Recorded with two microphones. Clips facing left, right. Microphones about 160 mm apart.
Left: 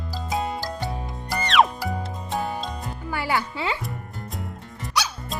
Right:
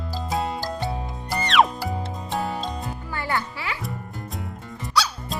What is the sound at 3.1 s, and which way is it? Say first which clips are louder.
Music: left 2 dB; 10° left (ahead or behind).